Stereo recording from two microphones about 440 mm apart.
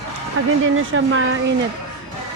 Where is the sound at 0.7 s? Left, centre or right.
Right.